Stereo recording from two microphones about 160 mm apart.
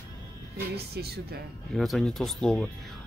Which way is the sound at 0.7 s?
85° right.